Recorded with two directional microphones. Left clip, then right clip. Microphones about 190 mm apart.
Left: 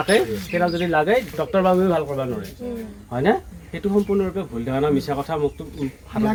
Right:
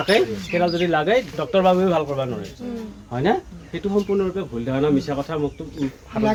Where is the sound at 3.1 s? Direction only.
5° left (ahead or behind).